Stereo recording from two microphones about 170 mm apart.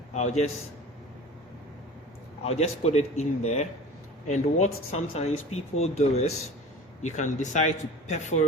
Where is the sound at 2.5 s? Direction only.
40° left (ahead or behind).